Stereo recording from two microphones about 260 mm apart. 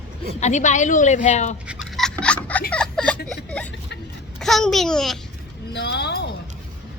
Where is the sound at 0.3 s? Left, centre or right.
Left.